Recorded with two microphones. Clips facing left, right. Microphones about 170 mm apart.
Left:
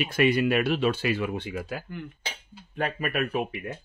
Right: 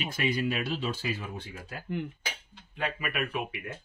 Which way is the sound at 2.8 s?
45° left (ahead or behind).